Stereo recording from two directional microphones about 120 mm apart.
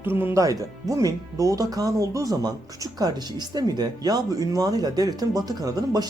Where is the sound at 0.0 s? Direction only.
20° right (ahead or behind).